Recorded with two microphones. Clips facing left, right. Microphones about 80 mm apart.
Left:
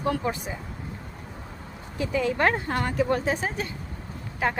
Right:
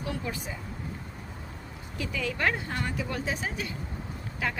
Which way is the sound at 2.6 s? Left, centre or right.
Left.